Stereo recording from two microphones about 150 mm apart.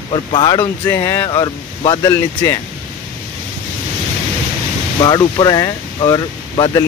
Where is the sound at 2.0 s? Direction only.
15° left (ahead or behind).